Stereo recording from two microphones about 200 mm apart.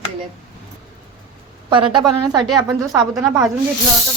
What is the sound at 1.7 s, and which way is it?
A woman's voice, 25° right (ahead or behind).